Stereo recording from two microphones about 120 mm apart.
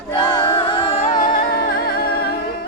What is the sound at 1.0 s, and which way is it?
Music, 60° left (ahead or behind).